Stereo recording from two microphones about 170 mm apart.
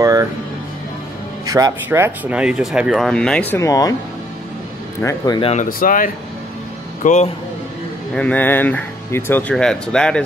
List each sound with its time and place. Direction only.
0.0 s music: 20° right (ahead or behind)
1.4 s speech: 20° right (ahead or behind); by 3.9 s 20° left (ahead or behind)
5.0 s speech: 20° left (ahead or behind)
5.4 s speech: 40° left (ahead or behind)
5.7 s speech: 55° left (ahead or behind)
7.0 s speech: 45° left (ahead or behind)
8.1 s speech: 5° left (ahead or behind)